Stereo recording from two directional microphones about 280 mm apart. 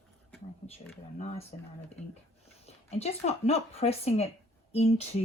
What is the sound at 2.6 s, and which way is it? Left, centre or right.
Speech, left.